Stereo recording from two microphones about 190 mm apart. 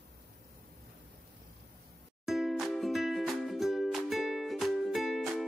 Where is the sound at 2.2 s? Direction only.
Centre (ahead or behind).